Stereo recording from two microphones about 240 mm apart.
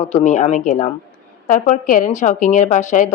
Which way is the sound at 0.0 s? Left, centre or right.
Left.